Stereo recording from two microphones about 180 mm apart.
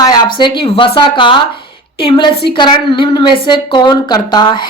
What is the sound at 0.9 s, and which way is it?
A woman's voice, 25° left (ahead or behind).